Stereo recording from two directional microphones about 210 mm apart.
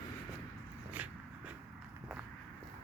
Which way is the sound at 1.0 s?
5° right (ahead or behind).